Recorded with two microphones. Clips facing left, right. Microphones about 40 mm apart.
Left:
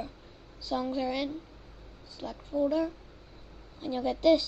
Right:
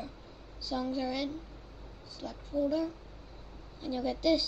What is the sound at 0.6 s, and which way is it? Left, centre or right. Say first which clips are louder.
A woman's voice: left 3 dB; left.